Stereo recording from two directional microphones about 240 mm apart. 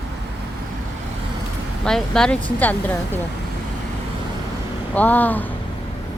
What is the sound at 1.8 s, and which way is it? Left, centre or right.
Speech, centre.